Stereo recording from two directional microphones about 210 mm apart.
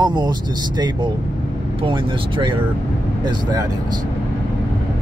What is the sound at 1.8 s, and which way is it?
Speech, 25° right (ahead or behind).